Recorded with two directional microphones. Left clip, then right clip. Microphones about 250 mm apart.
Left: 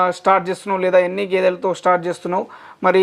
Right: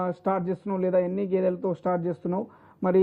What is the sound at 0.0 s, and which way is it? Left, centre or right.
Speech, centre.